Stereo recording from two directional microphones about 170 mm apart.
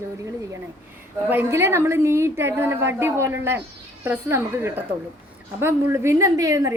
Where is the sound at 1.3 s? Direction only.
15° right (ahead or behind).